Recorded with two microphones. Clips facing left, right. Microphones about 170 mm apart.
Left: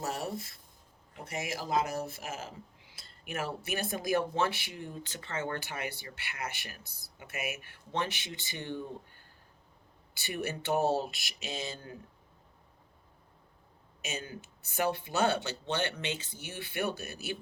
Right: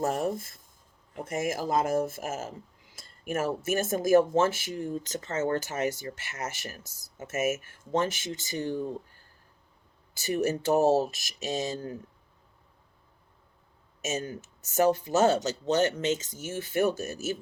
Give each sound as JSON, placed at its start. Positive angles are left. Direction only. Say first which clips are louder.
{"t": 0.0, "sound": "speech", "louder": "right 8 dB", "side_deg": -50}
{"t": 10.2, "sound": "speech", "louder": "right 9 dB", "side_deg": -40}
{"t": 14.0, "sound": "speech", "louder": "right 8 dB", "side_deg": -40}